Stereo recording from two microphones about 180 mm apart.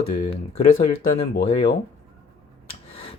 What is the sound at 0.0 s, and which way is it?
Speech, 30° left (ahead or behind).